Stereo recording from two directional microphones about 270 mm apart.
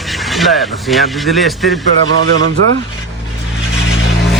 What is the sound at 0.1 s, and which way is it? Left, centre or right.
Speech, centre.